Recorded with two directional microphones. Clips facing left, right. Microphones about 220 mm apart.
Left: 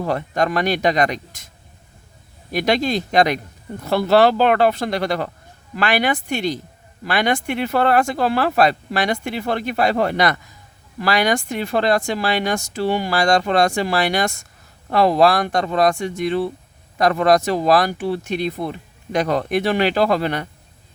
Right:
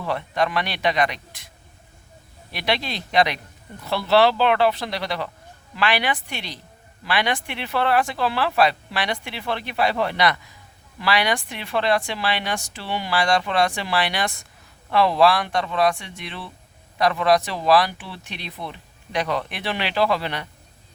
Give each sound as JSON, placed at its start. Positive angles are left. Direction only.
{"t": 0.0, "sound": "speech", "side_deg": 45}
{"t": 2.5, "sound": "speech", "side_deg": 45}